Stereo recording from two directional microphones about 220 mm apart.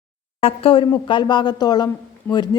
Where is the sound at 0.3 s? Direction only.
25° left (ahead or behind).